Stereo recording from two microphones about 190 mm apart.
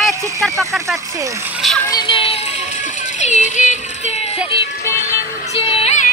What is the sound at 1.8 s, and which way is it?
Music, 25° left (ahead or behind).